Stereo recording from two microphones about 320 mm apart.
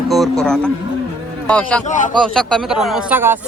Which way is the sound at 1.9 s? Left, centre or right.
Left.